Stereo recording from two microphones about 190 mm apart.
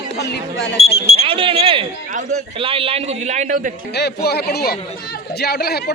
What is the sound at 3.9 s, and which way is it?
Speech, 60° left (ahead or behind).